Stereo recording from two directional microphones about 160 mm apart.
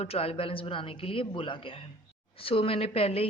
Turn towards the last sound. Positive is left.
turn(degrees=40)  # may be behind; listen again after turning